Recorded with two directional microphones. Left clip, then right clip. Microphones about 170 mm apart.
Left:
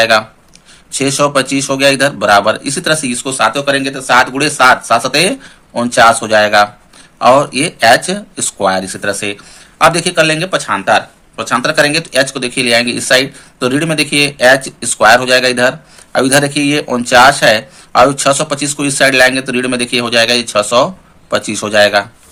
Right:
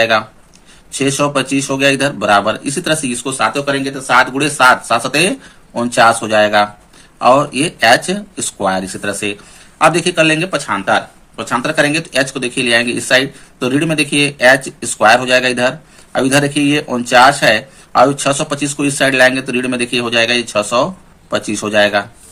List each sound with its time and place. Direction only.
0.0 s speech: 20° left (ahead or behind)